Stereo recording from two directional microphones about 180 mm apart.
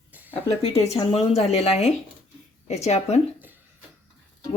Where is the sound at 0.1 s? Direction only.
10° right (ahead or behind).